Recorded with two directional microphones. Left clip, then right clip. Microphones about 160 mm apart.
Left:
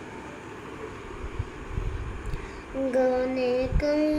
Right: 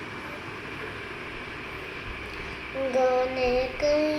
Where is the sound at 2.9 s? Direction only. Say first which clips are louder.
Right 1 dB; 35° left (ahead or behind).